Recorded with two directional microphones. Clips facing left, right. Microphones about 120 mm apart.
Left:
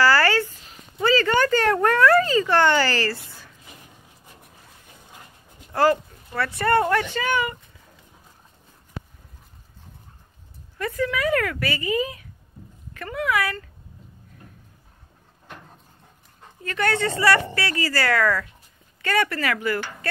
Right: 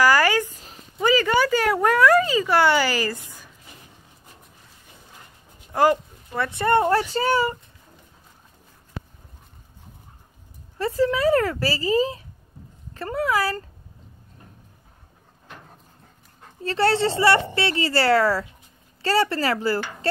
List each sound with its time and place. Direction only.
0.0 s a sound: 15° right (ahead or behind)
1.0 s speech: 10° right (ahead or behind)
5.7 s speech: 20° right (ahead or behind); by 7.5 s 35° right (ahead or behind)
10.8 s speech: 30° right (ahead or behind)
16.6 s speech: 30° right (ahead or behind)